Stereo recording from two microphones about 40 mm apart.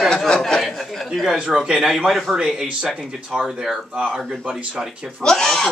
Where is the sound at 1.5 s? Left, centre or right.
Right.